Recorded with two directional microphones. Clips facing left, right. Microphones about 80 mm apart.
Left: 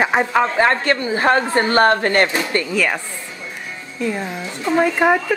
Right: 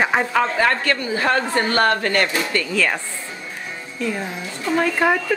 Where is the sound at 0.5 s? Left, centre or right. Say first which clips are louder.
Left 3 dB; left.